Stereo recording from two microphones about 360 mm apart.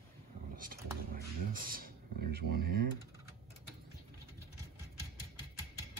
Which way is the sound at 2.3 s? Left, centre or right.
Right.